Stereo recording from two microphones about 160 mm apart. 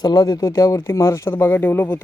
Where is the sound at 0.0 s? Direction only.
25° left (ahead or behind).